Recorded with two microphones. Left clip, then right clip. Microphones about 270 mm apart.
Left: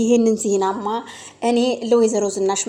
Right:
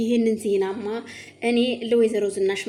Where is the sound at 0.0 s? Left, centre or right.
Centre.